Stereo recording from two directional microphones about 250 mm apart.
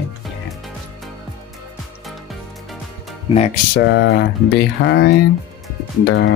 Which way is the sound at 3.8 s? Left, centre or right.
Left.